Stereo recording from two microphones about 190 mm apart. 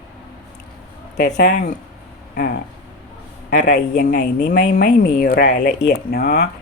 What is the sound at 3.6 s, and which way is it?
Speech, 60° left (ahead or behind).